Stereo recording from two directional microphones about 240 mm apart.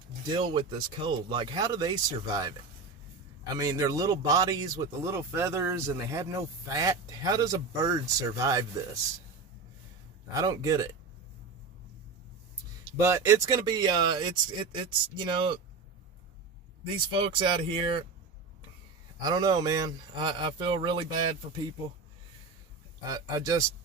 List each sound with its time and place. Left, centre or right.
0.3 s speech: centre
3.6 s speech: centre
10.3 s speech: centre
12.8 s speech: centre
17.1 s speech: right
19.2 s speech: centre
23.0 s speech: centre